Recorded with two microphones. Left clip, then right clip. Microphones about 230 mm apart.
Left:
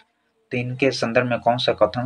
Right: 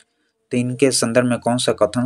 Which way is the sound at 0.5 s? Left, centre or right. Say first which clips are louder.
Right 4 dB; right.